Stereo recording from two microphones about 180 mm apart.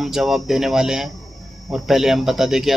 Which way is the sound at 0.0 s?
Centre (ahead or behind).